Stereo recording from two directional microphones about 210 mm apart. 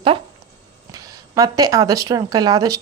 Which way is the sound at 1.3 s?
15° right (ahead or behind).